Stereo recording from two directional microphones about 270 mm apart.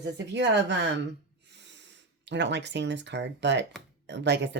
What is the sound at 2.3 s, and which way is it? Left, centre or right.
Speech, right.